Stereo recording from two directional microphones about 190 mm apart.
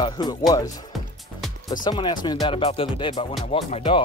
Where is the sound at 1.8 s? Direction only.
25° left (ahead or behind).